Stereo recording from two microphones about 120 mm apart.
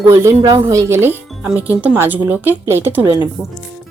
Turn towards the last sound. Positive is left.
turn(degrees=-15)  # may be behind; listen again after turning